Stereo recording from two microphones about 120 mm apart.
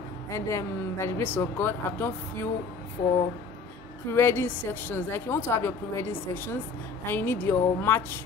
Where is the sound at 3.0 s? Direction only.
90° left.